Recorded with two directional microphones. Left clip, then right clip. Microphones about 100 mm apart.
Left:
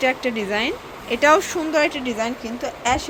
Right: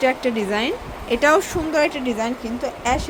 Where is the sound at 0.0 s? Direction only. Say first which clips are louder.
Right 1 dB; 15° right (ahead or behind).